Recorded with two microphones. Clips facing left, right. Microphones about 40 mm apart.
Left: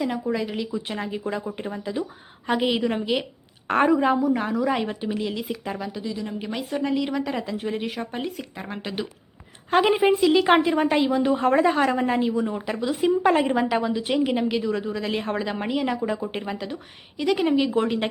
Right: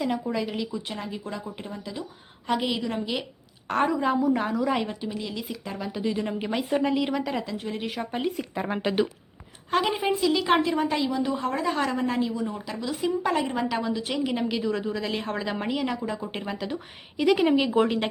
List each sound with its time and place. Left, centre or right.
0.0 s a woman's voice: centre
4.2 s speech: centre
4.9 s a woman's voice: left
6.0 s speech: right
6.5 s speech: centre
7.4 s speech: centre
8.6 s speech: centre
9.6 s a woman's voice: left
11.6 s a woman's voice: left; by 18.1 s centre